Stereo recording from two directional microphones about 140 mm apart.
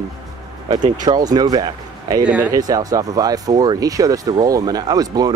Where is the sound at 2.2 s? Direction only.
10° right (ahead or behind).